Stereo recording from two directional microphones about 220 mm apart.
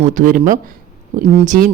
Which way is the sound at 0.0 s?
35° right (ahead or behind).